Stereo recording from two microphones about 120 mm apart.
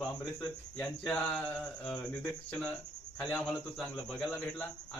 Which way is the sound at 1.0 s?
5° left (ahead or behind).